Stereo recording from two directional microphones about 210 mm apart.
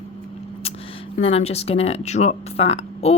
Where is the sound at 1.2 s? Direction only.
30° left (ahead or behind).